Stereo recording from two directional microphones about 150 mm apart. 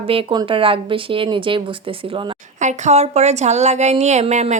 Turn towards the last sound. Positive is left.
turn(degrees=-50)  # may be behind; listen again after turning